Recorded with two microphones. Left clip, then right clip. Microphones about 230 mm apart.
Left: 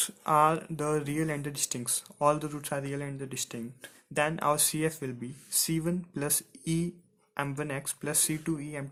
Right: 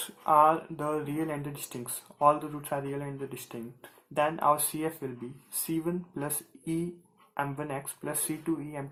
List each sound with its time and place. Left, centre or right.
0.3 s speech: left